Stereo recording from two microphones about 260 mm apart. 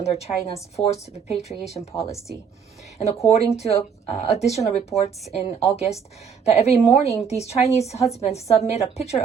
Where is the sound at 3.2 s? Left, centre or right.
Left.